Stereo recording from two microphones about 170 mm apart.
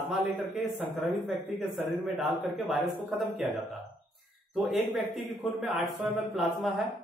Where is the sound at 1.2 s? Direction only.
Centre (ahead or behind).